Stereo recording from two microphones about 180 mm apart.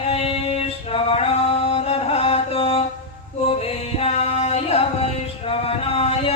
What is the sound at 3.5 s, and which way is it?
Music, 35° left (ahead or behind).